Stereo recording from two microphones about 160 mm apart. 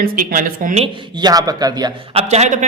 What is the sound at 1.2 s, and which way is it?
Speech, 25° right (ahead or behind).